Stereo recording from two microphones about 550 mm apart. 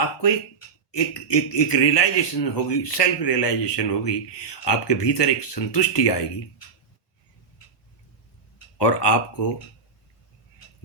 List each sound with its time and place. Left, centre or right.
0.9 s speech: left
8.8 s speech: left